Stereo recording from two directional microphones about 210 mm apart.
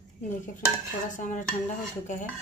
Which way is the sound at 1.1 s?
35° left (ahead or behind).